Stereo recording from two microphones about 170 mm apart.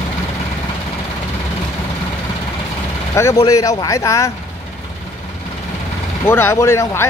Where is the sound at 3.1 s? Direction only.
15° left (ahead or behind).